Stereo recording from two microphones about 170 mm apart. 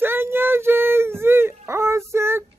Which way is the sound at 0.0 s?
15° right (ahead or behind).